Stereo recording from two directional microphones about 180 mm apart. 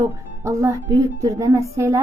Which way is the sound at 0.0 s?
15° right (ahead or behind).